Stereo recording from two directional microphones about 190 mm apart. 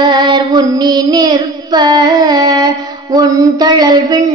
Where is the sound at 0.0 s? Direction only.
25° right (ahead or behind).